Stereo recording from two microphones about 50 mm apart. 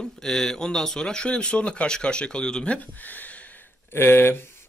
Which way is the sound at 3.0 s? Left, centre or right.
Left.